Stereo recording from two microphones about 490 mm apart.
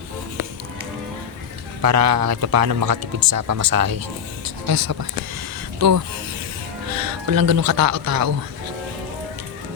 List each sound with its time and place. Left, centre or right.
1.8 s speech: right
6.9 s speech: right